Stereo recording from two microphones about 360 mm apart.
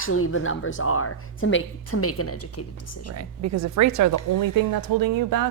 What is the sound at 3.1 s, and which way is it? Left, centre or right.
Speech, right.